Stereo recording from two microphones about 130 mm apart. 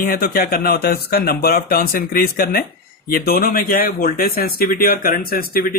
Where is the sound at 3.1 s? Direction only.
90° left.